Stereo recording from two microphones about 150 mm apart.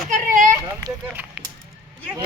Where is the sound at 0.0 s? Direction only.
60° right (ahead or behind).